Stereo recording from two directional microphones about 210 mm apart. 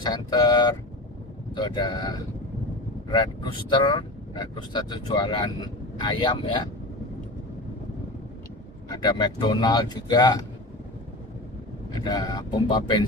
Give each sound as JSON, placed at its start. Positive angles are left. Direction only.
{"t": 0.0, "sound": "speech", "side_deg": 20}
{"t": 8.9, "sound": "speech", "side_deg": 20}
{"t": 12.0, "sound": "speech", "side_deg": 20}